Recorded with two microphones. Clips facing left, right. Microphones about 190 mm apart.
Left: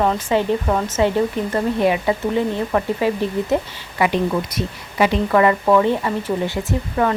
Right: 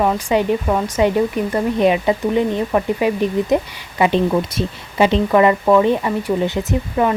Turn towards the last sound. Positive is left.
turn(degrees=-20)  # may be behind; listen again after turning